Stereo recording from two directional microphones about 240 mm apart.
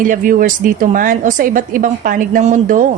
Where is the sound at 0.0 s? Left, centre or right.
Right.